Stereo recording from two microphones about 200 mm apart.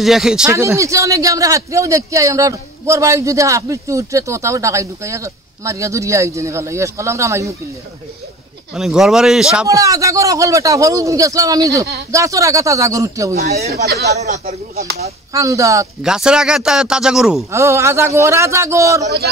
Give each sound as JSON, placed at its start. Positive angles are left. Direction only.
{"t": 0.0, "sound": "a man's voice", "side_deg": 0}
{"t": 0.5, "sound": "a man's voice", "side_deg": -15}
{"t": 8.7, "sound": "a man's voice", "side_deg": 0}
{"t": 9.7, "sound": "a man's voice", "side_deg": -15}
{"t": 13.5, "sound": "speech", "side_deg": -30}
{"t": 15.3, "sound": "a man's voice", "side_deg": -15}
{"t": 16.0, "sound": "a man's voice", "side_deg": -5}
{"t": 17.5, "sound": "a man's voice", "side_deg": -15}